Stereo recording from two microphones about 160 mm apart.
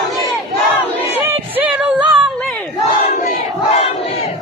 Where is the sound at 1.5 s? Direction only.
5° right (ahead or behind).